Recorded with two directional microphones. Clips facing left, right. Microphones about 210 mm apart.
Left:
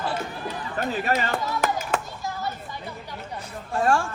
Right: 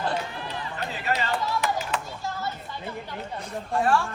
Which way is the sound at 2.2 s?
15° left (ahead or behind).